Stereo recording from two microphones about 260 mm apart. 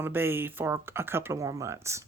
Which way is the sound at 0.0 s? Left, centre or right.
Centre.